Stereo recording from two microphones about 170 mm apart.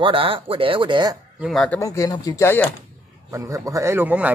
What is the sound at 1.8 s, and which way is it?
Speech, 20° left (ahead or behind).